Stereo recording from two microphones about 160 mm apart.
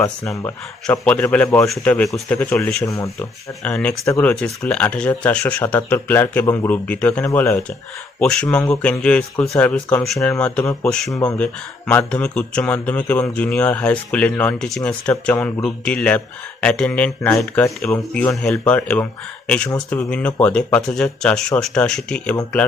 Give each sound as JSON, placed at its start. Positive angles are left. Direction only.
{"t": 0.0, "sound": "speech", "side_deg": 10}
{"t": 3.6, "sound": "speech", "side_deg": 5}
{"t": 8.2, "sound": "speech", "side_deg": 5}
{"t": 10.4, "sound": "speech", "side_deg": 5}